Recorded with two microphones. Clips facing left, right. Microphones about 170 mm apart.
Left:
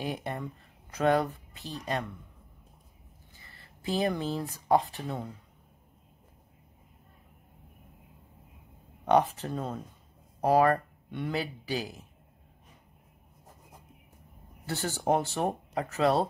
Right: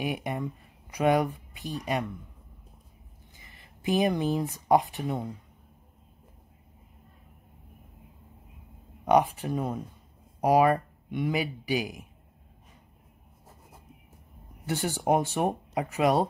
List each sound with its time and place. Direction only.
0.0 s a man's voice: 10° right (ahead or behind)
3.3 s speech: 15° right (ahead or behind)
9.0 s a man's voice: 10° right (ahead or behind)
14.7 s a man's voice: 15° right (ahead or behind)